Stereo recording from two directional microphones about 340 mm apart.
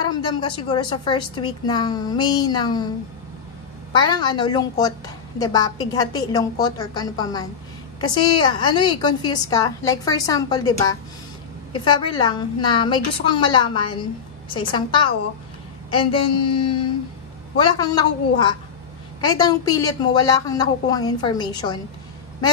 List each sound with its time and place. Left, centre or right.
0.0 s a woman's voice: centre
3.9 s a woman's voice: centre